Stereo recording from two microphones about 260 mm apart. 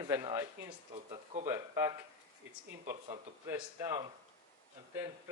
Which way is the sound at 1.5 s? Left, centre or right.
Centre.